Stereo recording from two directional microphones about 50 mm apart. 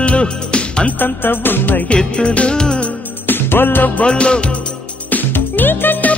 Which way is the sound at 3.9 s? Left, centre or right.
Left.